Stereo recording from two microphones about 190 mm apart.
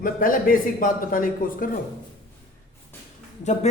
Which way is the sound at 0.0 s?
45° left (ahead or behind).